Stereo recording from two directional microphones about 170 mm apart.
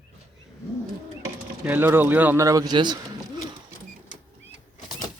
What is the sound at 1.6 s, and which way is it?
Speech, 10° right (ahead or behind).